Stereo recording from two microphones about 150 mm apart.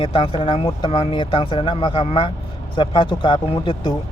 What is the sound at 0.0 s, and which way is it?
Speech, 35° left (ahead or behind).